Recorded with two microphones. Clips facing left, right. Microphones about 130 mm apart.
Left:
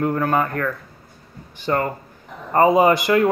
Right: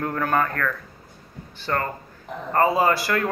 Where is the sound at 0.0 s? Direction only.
10° left (ahead or behind).